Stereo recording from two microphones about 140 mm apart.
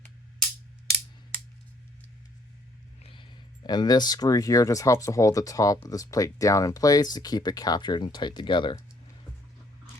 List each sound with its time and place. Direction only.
3.0 s speech: 35° left (ahead or behind)